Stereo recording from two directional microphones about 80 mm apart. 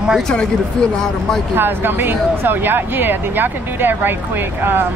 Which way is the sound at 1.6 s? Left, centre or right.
Right.